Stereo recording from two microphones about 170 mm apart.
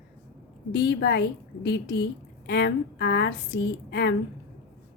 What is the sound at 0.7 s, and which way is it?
A woman's voice, 80° left.